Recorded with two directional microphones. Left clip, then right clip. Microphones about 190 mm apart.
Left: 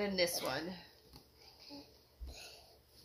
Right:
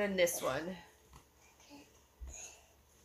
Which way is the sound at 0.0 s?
30° right (ahead or behind).